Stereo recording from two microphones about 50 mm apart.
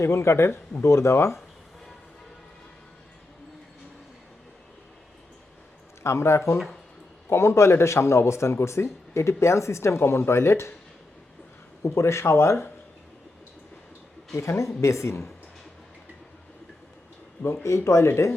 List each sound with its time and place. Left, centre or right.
0.0 s a man's voice: left
6.0 s a man's voice: left
11.8 s a man's voice: left
14.3 s speech: left
17.4 s a man's voice: left